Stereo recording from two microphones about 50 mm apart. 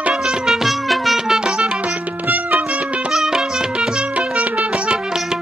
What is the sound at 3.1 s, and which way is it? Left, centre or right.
Music, centre.